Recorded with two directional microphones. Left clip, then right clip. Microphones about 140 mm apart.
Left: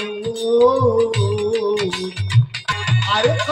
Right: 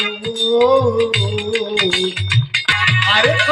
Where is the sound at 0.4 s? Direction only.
50° left (ahead or behind).